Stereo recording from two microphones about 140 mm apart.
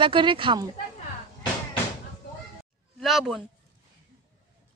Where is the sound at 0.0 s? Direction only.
35° right (ahead or behind).